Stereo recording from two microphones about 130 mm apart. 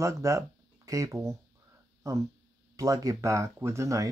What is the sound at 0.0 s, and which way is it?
Speech, 25° right (ahead or behind).